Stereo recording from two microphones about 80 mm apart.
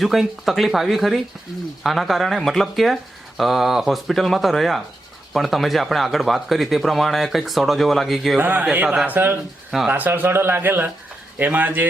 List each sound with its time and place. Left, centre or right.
0.0 s speech: centre
8.4 s a man's voice: right